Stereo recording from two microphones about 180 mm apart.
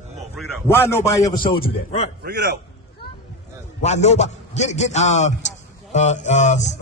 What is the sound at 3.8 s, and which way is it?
Music, 40° left (ahead or behind).